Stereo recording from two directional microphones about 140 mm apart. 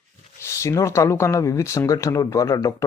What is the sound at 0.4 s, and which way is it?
Speech, 20° left (ahead or behind).